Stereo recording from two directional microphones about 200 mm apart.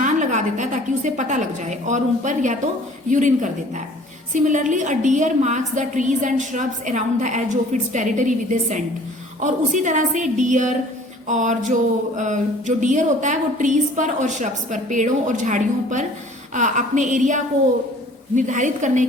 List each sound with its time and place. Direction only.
0.0 s a woman's voice: 40° right (ahead or behind)